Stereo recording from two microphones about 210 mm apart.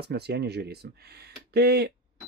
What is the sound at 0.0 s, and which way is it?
Speech, 50° right (ahead or behind).